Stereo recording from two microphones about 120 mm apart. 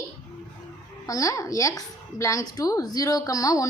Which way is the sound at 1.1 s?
30° left (ahead or behind).